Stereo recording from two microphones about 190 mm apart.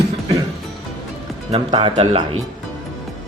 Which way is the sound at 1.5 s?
25° right (ahead or behind).